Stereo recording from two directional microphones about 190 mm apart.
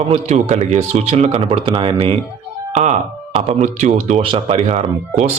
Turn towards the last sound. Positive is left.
turn(degrees=-35)  # may be behind; listen again after turning